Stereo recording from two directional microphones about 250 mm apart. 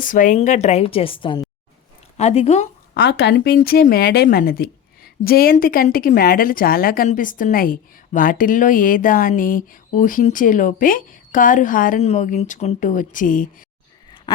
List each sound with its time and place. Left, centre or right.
0.0 s a woman's voice: left
2.9 s speech: left